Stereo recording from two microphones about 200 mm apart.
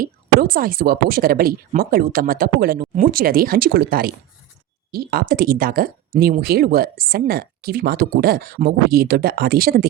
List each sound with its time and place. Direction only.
0.0 s speech: 45° right (ahead or behind)